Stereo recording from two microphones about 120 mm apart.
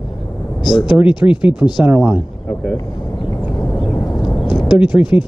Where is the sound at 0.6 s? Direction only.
40° left (ahead or behind).